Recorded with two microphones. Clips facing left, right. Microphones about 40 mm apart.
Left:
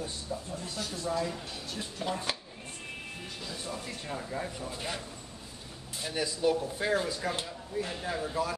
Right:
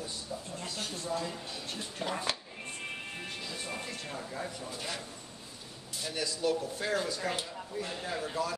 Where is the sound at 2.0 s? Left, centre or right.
Centre.